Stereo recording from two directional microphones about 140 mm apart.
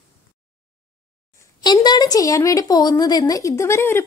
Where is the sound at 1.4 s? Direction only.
30° left (ahead or behind).